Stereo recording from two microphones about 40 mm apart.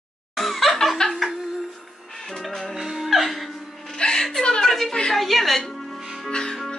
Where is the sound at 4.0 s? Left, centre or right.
Centre.